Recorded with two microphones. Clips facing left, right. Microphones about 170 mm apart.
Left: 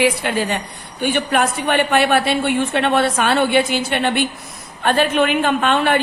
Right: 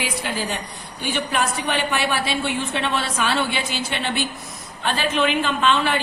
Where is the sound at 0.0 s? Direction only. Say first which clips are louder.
Left 9 dB; 65° left (ahead or behind).